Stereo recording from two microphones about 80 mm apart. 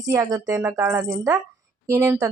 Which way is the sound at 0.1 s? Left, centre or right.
Right.